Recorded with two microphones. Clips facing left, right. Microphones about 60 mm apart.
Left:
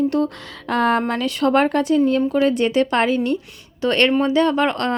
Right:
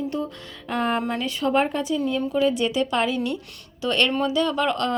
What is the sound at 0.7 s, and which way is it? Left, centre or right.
Speech, left.